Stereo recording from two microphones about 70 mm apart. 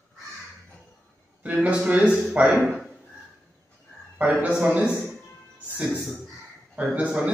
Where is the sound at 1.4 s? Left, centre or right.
Centre.